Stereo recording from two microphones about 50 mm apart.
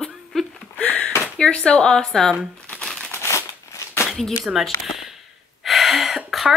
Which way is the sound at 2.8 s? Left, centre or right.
Centre.